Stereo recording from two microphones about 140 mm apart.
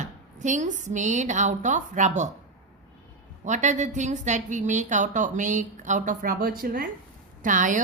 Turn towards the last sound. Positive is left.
turn(degrees=-65)  # may be behind; listen again after turning